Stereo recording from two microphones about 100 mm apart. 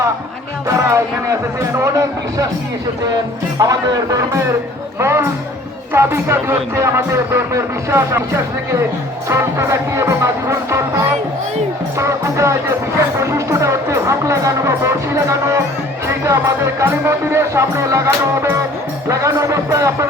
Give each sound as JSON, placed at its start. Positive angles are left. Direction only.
{"t": 0.7, "sound": "music", "side_deg": -30}
{"t": 1.8, "sound": "a man's voice", "side_deg": -30}
{"t": 3.6, "sound": "a man's voice", "side_deg": -35}
{"t": 9.3, "sound": "music", "side_deg": -25}
{"t": 11.9, "sound": "speech", "side_deg": -30}